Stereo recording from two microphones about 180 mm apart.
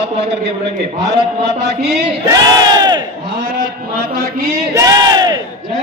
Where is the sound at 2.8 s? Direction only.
25° right (ahead or behind).